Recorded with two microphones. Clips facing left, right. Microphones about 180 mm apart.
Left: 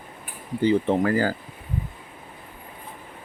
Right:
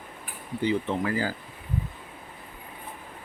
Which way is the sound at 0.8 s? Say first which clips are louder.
Left 6 dB; 45° left (ahead or behind).